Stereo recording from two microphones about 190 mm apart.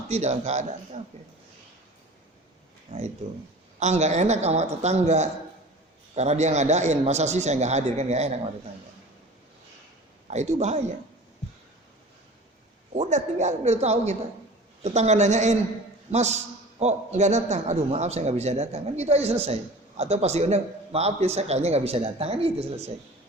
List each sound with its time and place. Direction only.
0.1 s a man's voice: 35° right (ahead or behind)
2.9 s a man's voice: 40° right (ahead or behind)
10.2 s a man's voice: 35° right (ahead or behind)
13.0 s a man's voice: 40° right (ahead or behind)